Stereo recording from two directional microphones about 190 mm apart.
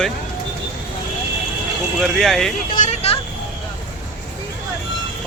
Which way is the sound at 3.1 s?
35° left (ahead or behind).